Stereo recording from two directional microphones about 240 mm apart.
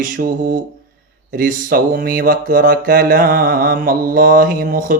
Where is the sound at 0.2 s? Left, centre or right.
Right.